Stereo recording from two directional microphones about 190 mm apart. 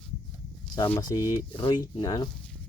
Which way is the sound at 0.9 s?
20° left (ahead or behind).